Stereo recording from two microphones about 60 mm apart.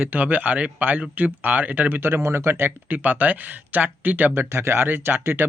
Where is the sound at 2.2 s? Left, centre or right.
Right.